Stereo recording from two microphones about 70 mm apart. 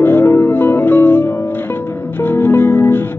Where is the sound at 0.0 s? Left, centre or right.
Left.